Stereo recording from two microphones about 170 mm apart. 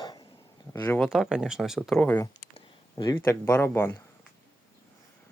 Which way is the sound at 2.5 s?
30° left (ahead or behind).